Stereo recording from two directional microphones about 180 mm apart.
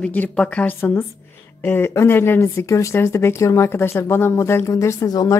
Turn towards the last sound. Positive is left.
turn(degrees=20)  # may be behind; listen again after turning